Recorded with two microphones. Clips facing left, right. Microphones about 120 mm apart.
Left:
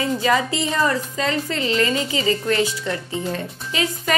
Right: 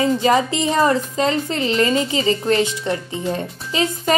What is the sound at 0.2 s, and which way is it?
A woman's voice, 25° right (ahead or behind).